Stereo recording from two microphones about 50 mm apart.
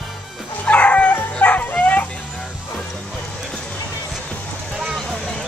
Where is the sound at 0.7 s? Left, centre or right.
Left.